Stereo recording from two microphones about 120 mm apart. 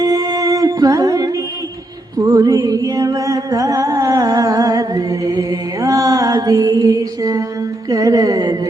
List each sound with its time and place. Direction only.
0.0 s music: 30° right (ahead or behind)